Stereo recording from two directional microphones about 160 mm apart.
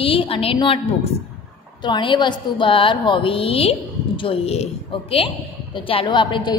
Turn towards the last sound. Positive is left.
turn(degrees=30)  # may be behind; listen again after turning